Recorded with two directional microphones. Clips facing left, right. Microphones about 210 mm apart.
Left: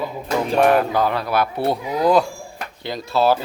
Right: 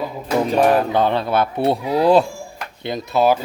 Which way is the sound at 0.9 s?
25° right (ahead or behind).